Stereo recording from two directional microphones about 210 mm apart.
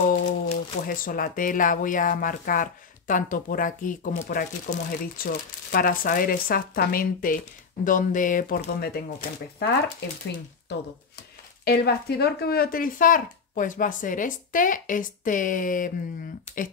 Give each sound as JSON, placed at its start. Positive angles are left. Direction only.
{"t": 0.1, "sound": "speech", "side_deg": 40}